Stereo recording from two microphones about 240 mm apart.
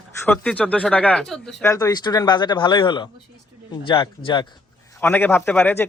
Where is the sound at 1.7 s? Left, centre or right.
Centre.